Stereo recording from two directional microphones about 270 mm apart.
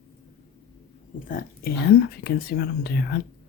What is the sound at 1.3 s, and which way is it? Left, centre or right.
Whispering, left.